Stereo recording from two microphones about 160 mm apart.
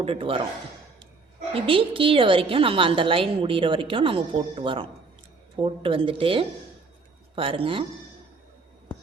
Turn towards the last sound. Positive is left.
turn(degrees=-35)  # may be behind; listen again after turning